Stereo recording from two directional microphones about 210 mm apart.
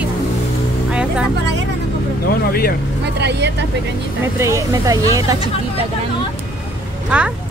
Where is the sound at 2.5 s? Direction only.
45° left (ahead or behind).